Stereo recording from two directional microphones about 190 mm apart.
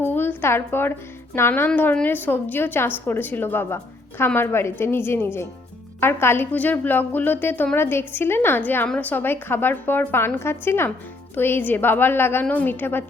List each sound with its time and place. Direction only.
0.0 s a woman's voice: 10° left (ahead or behind)